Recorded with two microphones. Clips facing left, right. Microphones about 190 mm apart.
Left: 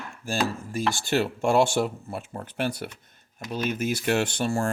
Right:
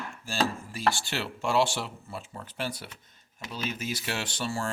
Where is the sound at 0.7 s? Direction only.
50° left (ahead or behind).